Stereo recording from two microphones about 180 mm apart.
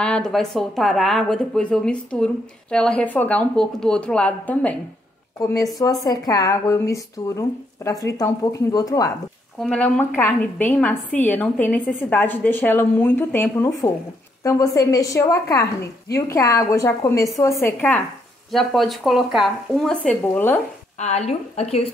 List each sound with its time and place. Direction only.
0.0 s speech: 5° left (ahead or behind)
5.8 s speech: 20° left (ahead or behind)
9.6 s a woman's voice: 5° left (ahead or behind)
21.0 s a woman's voice: 40° left (ahead or behind)